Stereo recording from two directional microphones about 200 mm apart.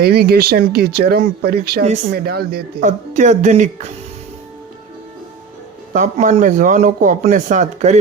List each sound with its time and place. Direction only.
0.0 s speech: 50° right (ahead or behind)
3.2 s a man's voice: 35° right (ahead or behind)
5.9 s a man's voice: 40° right (ahead or behind)